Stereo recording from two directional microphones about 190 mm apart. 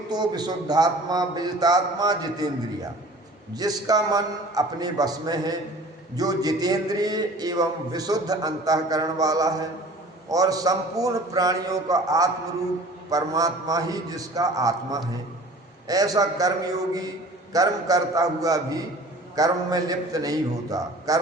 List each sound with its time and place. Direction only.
0.1 s a man's voice: 20° right (ahead or behind)
3.5 s a man's voice: 20° right (ahead or behind)
17.5 s a man's voice: 20° right (ahead or behind)